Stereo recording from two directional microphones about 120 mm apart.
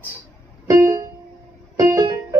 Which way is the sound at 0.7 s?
25° right (ahead or behind).